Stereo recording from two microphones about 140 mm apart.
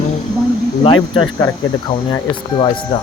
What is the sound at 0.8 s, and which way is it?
Speech, 35° left (ahead or behind).